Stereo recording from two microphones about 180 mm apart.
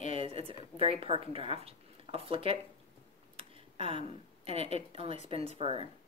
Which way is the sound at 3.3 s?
30° right (ahead or behind).